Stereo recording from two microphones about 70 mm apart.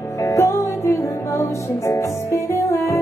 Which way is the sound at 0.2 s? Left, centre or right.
Left.